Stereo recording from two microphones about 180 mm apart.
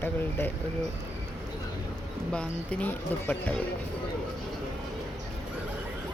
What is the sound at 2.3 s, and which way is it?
Speech, 5° left (ahead or behind).